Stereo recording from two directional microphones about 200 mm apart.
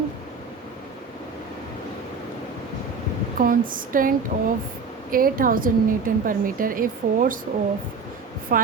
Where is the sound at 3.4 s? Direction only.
45° right (ahead or behind).